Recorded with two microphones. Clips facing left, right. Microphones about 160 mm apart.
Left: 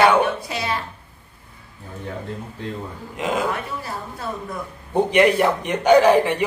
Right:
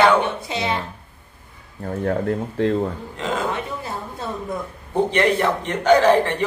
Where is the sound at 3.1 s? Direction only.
10° left (ahead or behind).